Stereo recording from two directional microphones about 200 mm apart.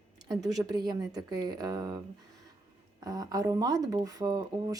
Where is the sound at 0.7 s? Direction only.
20° right (ahead or behind).